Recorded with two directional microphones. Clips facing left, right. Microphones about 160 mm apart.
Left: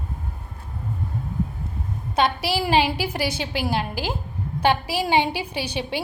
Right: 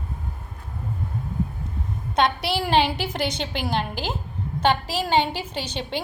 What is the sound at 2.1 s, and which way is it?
A woman's voice, 5° left (ahead or behind).